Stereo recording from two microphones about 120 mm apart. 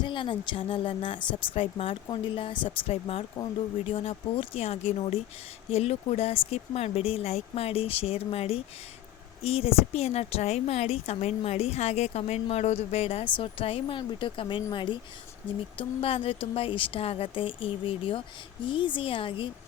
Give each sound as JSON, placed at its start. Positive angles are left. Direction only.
{"t": 0.0, "sound": "speech", "side_deg": 40}